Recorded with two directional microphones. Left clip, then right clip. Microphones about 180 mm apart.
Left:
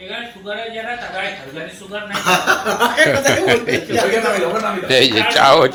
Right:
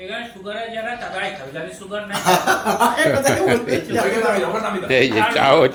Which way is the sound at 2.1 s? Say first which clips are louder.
Left 2 dB; 75° right (ahead or behind).